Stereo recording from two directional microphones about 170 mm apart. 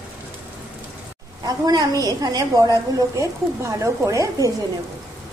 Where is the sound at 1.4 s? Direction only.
25° right (ahead or behind).